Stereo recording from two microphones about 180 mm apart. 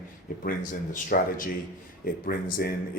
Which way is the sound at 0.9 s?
50° left (ahead or behind).